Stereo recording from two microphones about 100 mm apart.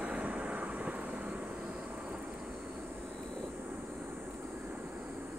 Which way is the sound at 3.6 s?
15° right (ahead or behind).